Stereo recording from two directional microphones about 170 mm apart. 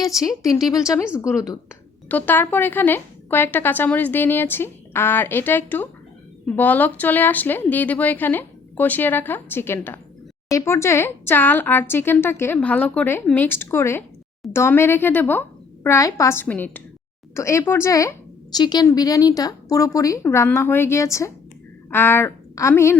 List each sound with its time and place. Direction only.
0.0 s a woman's voice: 20° left (ahead or behind)